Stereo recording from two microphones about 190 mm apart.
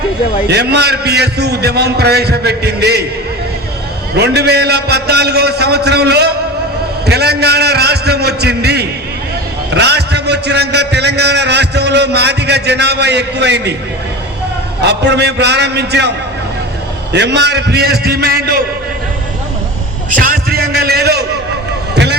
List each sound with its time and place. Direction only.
0.4 s a man's voice: 60° right (ahead or behind)
4.1 s a man's voice: 60° right (ahead or behind)
14.8 s a man's voice: 60° right (ahead or behind)
20.1 s a sound: 45° right (ahead or behind)